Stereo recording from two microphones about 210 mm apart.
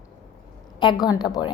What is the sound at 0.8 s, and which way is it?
Speech, 20° left (ahead or behind).